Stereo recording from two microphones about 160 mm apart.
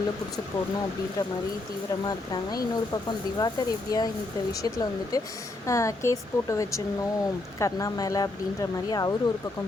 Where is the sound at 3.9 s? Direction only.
25° left (ahead or behind).